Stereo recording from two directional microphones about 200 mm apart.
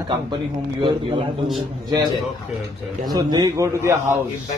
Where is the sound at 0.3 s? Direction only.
25° right (ahead or behind).